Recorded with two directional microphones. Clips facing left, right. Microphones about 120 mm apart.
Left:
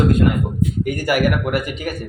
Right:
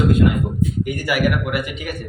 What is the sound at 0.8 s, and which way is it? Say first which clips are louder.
Speech: left 3 dB; 45° left (ahead or behind).